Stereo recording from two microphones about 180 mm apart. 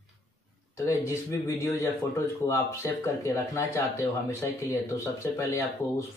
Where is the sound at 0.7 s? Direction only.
15° left (ahead or behind).